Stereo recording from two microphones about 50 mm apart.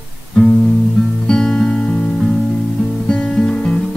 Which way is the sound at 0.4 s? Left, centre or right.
Centre.